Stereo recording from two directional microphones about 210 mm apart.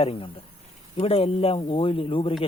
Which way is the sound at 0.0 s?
25° left (ahead or behind).